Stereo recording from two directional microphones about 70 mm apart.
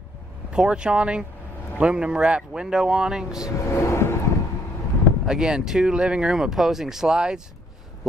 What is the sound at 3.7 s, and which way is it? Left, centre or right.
Vehicle, left.